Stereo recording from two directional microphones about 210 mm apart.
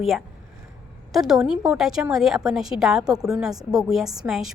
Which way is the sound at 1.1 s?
Centre (ahead or behind).